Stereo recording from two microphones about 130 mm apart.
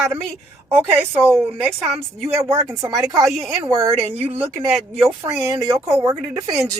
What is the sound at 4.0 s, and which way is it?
Speech, 50° right (ahead or behind).